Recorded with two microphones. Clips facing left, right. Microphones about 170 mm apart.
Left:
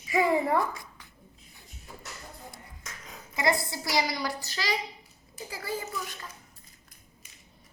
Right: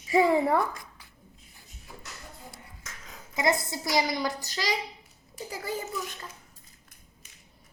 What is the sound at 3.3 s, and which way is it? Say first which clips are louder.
A woman's voice: right 1 dB; 20° right (ahead or behind).